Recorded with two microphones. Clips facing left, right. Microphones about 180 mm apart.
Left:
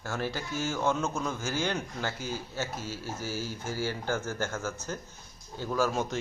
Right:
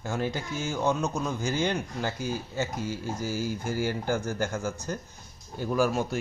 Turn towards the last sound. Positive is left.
turn(degrees=-15)  # may be behind; listen again after turning